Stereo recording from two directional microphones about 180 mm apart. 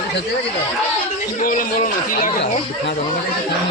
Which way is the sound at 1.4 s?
50° left (ahead or behind).